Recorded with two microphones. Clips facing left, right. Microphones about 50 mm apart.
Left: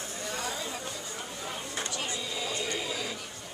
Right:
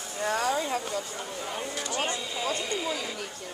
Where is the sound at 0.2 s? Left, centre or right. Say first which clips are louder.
Right 9 dB; right.